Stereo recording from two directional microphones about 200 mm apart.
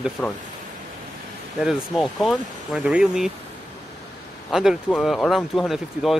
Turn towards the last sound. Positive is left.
turn(degrees=0)  # may be behind; listen again after turning